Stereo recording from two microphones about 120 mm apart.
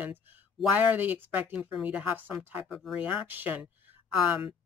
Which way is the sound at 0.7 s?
15° right (ahead or behind).